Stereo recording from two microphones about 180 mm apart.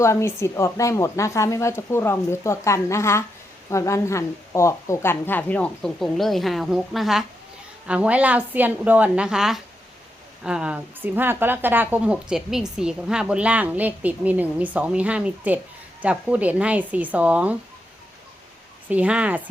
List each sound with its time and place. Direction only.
0.0 s a woman's voice: 15° left (ahead or behind); by 17.6 s 10° right (ahead or behind)
18.9 s a woman's voice: 5° right (ahead or behind)